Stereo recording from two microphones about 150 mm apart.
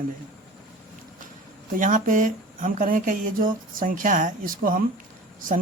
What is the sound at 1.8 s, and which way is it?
Speech, 60° right (ahead or behind).